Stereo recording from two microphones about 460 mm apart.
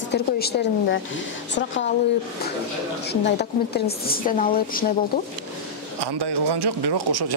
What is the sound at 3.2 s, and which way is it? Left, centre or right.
A woman's voice, left.